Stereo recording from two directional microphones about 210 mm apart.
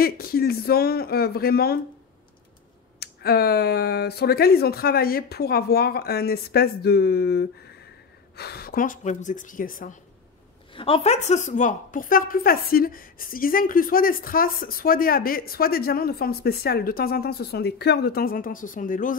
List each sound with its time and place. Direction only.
0.0 s a woman's voice: 45° left (ahead or behind)
3.0 s a woman's voice: 50° left (ahead or behind)
10.7 s a woman's voice: 25° left (ahead or behind)